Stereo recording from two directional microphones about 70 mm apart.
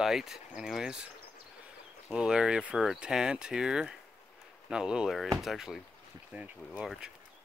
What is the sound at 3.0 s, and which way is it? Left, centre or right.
Speech, centre.